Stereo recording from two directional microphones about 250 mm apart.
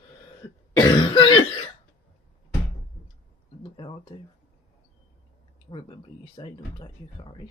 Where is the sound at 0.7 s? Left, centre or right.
Centre.